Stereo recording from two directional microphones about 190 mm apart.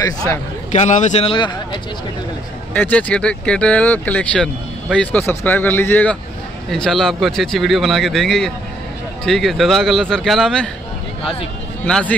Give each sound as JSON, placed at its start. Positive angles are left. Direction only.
{"t": 0.7, "sound": "speech", "side_deg": 40}
{"t": 2.7, "sound": "speech", "side_deg": 10}
{"t": 11.8, "sound": "speech", "side_deg": 5}